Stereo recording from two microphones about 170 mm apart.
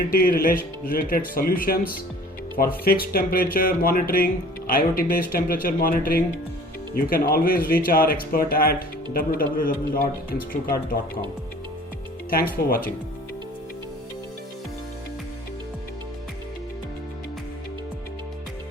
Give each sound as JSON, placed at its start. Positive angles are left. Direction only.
{"t": 0.1, "sound": "speech", "side_deg": 60}
{"t": 12.3, "sound": "speech", "side_deg": 60}